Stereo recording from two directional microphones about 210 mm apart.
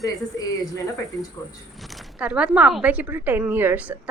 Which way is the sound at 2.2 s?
5° right (ahead or behind).